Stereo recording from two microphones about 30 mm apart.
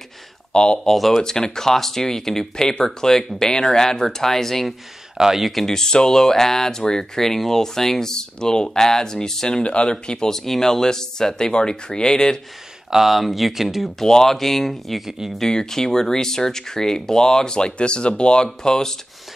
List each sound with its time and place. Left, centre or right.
0.5 s speech: left
0.8 s speech: centre
1.2 s speech: left
5.1 s speech: centre
5.5 s speech: centre
9.6 s speech: left
10.2 s speech: centre
12.9 s speech: centre
14.2 s speech: centre
15.0 s speech: centre
15.4 s speech: centre
17.6 s speech: left